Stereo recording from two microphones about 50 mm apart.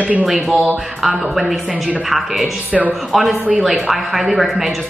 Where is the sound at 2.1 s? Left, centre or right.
Centre.